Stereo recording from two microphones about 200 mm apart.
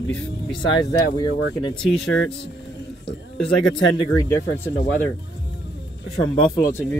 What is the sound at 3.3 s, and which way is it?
Speech, centre (ahead or behind).